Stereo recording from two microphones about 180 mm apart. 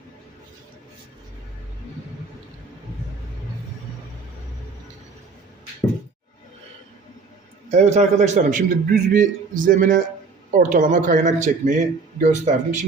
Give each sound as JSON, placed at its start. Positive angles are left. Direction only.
{"t": 7.7, "sound": "a man's voice", "side_deg": -40}